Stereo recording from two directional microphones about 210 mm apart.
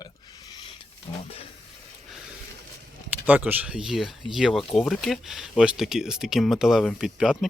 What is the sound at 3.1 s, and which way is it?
Speech, 10° right (ahead or behind).